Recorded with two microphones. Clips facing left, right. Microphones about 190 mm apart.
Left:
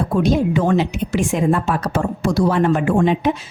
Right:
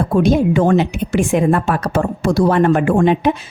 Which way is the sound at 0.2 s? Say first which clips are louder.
Right 4 dB; 50° right (ahead or behind).